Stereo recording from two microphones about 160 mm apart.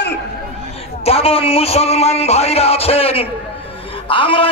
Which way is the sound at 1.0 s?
40° left (ahead or behind).